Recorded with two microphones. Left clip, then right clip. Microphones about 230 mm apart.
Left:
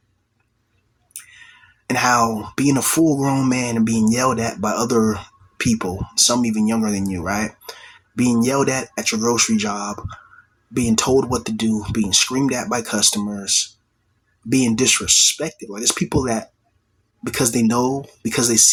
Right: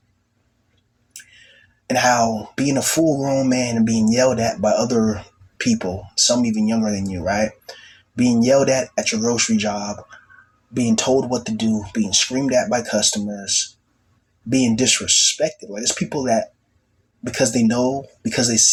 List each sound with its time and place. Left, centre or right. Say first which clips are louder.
1.9 s speech: even; centre